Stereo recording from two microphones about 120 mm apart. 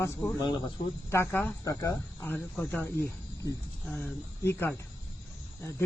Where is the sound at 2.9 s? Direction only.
30° left (ahead or behind).